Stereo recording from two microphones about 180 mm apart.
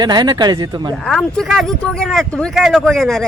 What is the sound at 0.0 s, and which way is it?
Speech, 25° right (ahead or behind).